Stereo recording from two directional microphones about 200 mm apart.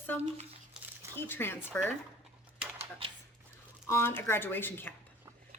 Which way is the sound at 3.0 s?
25° right (ahead or behind).